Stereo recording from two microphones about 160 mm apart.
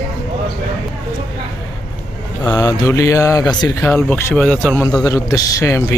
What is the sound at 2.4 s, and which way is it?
Speech, 25° left (ahead or behind).